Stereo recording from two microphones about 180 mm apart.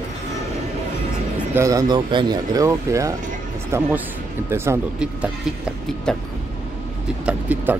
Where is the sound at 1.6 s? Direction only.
20° right (ahead or behind).